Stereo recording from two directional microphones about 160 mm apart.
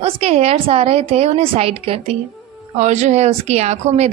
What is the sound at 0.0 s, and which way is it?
A woman's voice, 40° right (ahead or behind).